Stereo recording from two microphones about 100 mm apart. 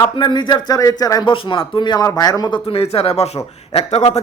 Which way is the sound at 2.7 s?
75° left (ahead or behind).